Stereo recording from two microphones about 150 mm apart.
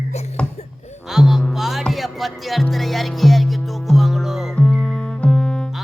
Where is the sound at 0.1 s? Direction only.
45° left (ahead or behind).